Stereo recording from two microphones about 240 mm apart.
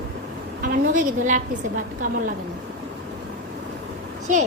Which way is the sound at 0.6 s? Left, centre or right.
Right.